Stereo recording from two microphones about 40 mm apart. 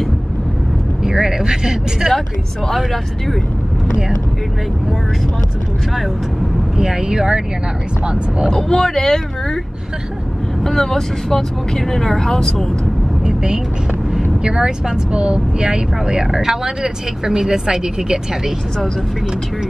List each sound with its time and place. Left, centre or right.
1.0 s speech: centre
2.7 s speech: centre
6.8 s speech: centre
8.5 s speech: centre
10.6 s speech: centre
13.2 s vehicle: centre
14.4 s speech: centre